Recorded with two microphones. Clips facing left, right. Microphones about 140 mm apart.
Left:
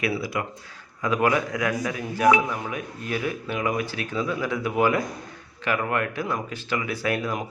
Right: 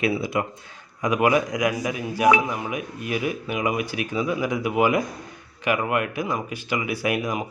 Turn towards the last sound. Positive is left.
turn(degrees=-15)  # may be behind; listen again after turning